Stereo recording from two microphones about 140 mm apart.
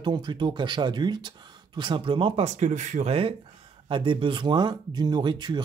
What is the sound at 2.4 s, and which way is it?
Speech, 55° right (ahead or behind).